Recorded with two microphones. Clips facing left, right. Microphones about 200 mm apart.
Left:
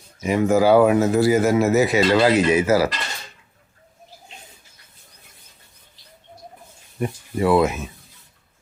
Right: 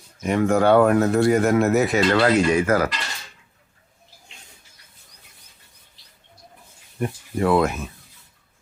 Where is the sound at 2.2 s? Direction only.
20° left (ahead or behind).